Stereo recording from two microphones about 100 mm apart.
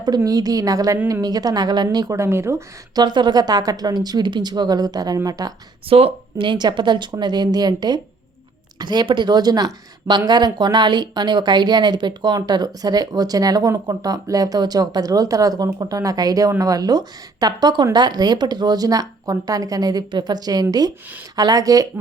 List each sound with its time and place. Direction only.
0.3 s speech: 40° right (ahead or behind)
3.0 s speech: 50° right (ahead or behind)
5.9 s speech: 75° right (ahead or behind)
6.5 s speech: 50° right (ahead or behind)